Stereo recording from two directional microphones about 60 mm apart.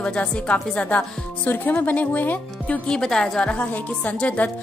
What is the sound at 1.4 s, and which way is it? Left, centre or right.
A woman's voice, left.